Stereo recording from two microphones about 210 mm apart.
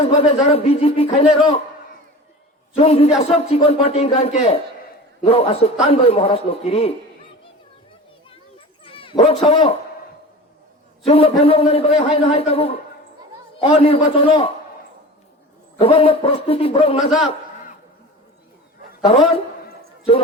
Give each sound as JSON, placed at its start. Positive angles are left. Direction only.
{"t": 0.0, "sound": "a man's voice", "side_deg": 30}
{"t": 2.7, "sound": "a man's voice", "side_deg": 30}
{"t": 8.8, "sound": "speech", "side_deg": 25}
{"t": 11.0, "sound": "a man's voice", "side_deg": 30}
{"t": 15.8, "sound": "a man's voice", "side_deg": 25}